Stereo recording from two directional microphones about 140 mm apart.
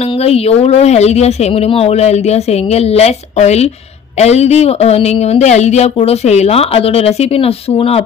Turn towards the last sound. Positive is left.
turn(degrees=45)  # may be behind; listen again after turning